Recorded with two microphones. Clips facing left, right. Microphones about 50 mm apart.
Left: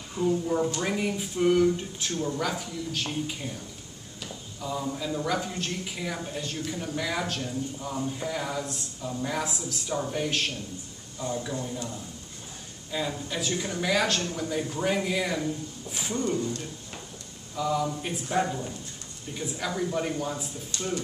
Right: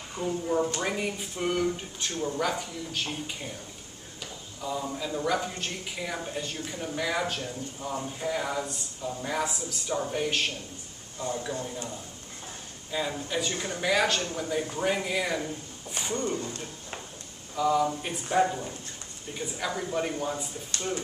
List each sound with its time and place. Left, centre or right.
0.2 s speech: right
0.7 s speech: centre
12.9 s speech: centre
16.3 s speech: right
17.6 s speech: centre